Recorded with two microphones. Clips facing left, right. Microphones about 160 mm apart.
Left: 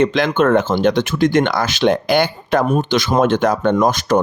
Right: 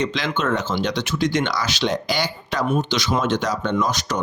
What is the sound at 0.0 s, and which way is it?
Speech, 55° left (ahead or behind).